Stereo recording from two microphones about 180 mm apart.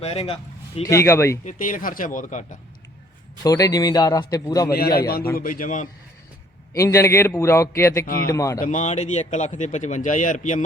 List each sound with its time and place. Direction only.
0.0 s speech: 35° left (ahead or behind)
0.9 s a man's voice: 15° left (ahead or behind)
1.5 s speech: 45° left (ahead or behind)
3.4 s a man's voice: 20° left (ahead or behind)
4.7 s a man's voice: 60° left (ahead or behind)
6.7 s a man's voice: 15° left (ahead or behind)
8.0 s a man's voice: 55° left (ahead or behind)
8.3 s a man's voice: 15° left (ahead or behind)
8.5 s speech: 45° left (ahead or behind)